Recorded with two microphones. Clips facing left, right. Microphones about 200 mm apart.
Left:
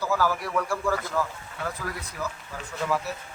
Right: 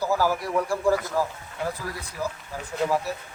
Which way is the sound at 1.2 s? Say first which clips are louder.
Right 2 dB; 35° right (ahead or behind).